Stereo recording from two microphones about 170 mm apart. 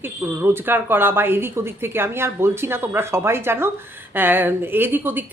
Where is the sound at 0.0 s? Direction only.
15° right (ahead or behind).